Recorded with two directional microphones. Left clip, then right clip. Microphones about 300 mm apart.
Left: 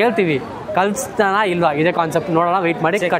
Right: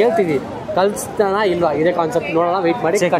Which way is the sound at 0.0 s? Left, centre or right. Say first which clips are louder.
Right 1 dB; left.